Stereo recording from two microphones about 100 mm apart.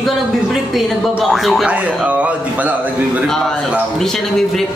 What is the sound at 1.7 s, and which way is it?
Speech, 15° right (ahead or behind).